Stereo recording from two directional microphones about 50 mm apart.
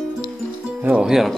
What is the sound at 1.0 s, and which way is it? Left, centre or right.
Speech, centre.